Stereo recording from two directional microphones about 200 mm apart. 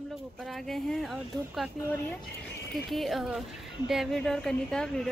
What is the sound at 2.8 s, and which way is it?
Speech, centre (ahead or behind).